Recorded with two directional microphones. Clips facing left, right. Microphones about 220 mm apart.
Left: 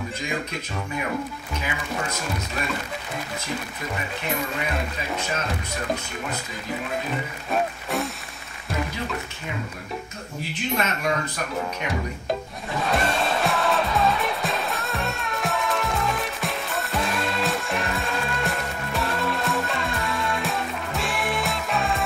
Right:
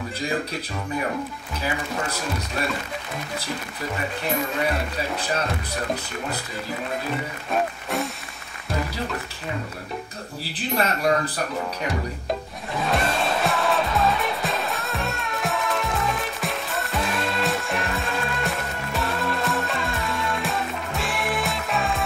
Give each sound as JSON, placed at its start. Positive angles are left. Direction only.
{"t": 0.2, "sound": "speech", "side_deg": -35}
{"t": 1.6, "sound": "speech", "side_deg": -35}
{"t": 5.1, "sound": "speech", "side_deg": -35}
{"t": 7.5, "sound": "music", "side_deg": 0}
{"t": 10.4, "sound": "speech", "side_deg": -35}
{"t": 12.8, "sound": "music", "side_deg": 0}